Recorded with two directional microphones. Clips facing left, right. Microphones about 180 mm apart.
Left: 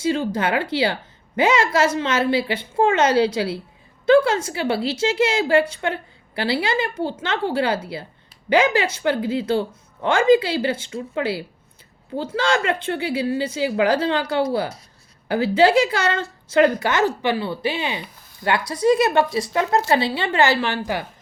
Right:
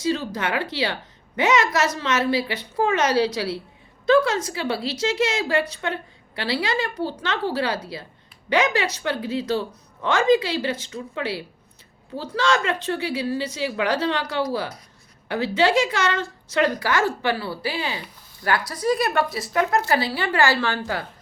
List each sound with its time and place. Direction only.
0.0 s a woman's voice: 30° left (ahead or behind)